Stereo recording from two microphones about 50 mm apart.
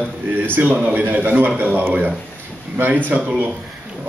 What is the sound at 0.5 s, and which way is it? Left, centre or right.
Speech, right.